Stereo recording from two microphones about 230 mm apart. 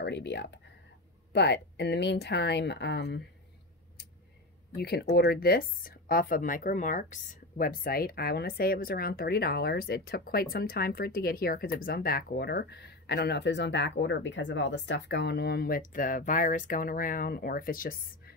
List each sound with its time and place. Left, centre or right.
0.0 s speech: left
4.7 s speech: left